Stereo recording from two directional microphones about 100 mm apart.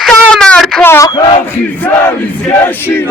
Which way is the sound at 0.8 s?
25° left (ahead or behind).